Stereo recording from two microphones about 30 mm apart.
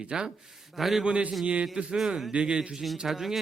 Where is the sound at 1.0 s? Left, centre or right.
Right.